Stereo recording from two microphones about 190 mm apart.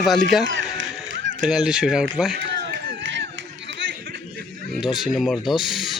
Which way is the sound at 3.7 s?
70° right (ahead or behind).